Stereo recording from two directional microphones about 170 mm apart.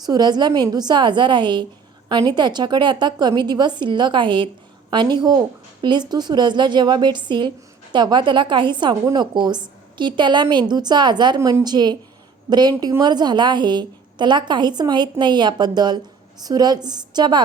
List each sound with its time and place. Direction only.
0.0 s a woman's voice: 25° right (ahead or behind)